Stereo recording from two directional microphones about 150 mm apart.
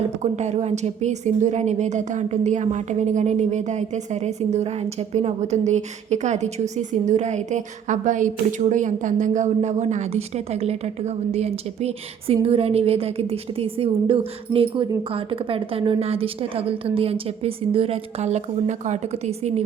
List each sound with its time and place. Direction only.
0.2 s a woman's voice: 50° right (ahead or behind)